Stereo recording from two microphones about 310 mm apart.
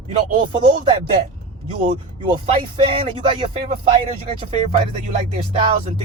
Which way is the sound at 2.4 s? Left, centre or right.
Centre.